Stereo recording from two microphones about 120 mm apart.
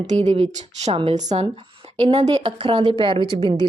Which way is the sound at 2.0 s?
50° right (ahead or behind).